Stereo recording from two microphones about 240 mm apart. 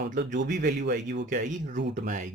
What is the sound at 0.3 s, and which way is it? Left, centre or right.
Speech, right.